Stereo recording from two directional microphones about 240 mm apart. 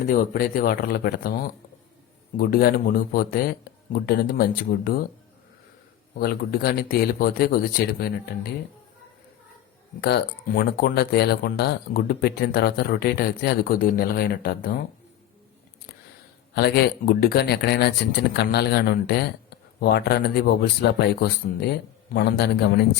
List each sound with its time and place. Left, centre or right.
0.1 s speech: left
6.1 s speech: left
10.0 s speech: left
16.6 s speech: left